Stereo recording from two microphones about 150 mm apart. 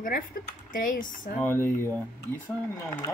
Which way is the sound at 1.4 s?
15° left (ahead or behind).